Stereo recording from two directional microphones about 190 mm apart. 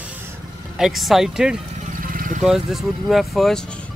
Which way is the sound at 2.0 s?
45° right (ahead or behind).